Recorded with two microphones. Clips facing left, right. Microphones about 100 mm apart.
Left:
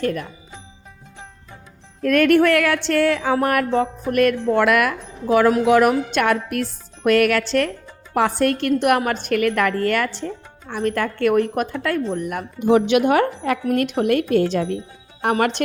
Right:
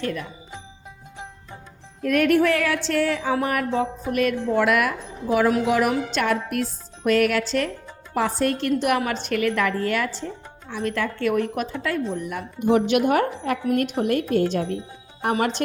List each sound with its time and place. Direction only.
0.0 s a woman's voice: 45° left (ahead or behind)
2.0 s music: 70° left (ahead or behind)
5.6 s speech: 75° left (ahead or behind)
10.7 s a woman's voice: 50° left (ahead or behind)
12.5 s a woman's voice: 90° left
15.2 s music: 75° left (ahead or behind)